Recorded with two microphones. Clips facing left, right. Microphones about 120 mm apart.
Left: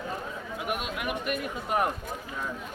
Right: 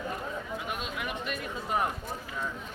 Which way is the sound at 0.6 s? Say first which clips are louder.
Left 4 dB; 20° left (ahead or behind).